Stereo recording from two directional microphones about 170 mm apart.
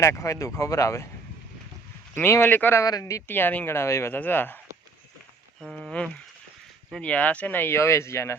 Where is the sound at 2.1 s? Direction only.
15° left (ahead or behind).